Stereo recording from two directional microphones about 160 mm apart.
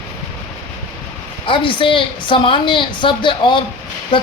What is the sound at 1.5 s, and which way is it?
A woman's voice, 30° left (ahead or behind).